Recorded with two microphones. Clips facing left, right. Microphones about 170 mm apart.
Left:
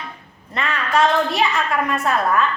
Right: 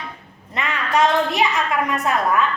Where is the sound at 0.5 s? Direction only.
15° right (ahead or behind).